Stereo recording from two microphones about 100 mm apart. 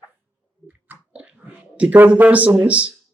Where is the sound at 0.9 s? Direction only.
10° right (ahead or behind).